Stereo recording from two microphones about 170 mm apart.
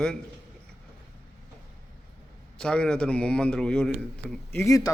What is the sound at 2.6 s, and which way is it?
A man's voice, 5° left (ahead or behind).